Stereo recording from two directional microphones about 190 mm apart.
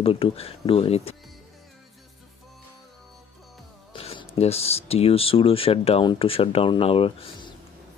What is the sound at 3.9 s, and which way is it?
Speech, 30° left (ahead or behind).